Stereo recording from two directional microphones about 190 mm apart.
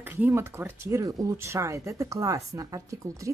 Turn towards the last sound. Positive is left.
turn(degrees=-15)  # may be behind; listen again after turning